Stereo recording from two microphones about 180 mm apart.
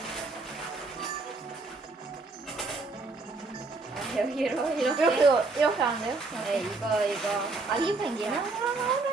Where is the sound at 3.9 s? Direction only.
Centre (ahead or behind).